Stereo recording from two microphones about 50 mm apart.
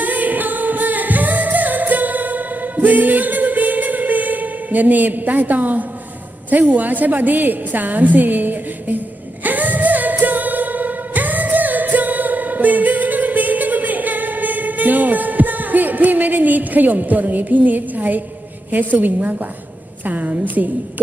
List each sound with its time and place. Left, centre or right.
0.0 s singing: right
6.5 s a woman's voice: right
9.4 s music: right
18.7 s a woman's voice: right